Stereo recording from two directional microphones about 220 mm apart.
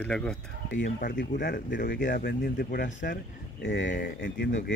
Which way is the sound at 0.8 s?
40° left (ahead or behind).